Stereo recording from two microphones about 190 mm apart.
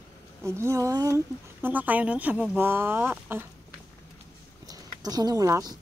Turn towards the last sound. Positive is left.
turn(degrees=-20)  # may be behind; listen again after turning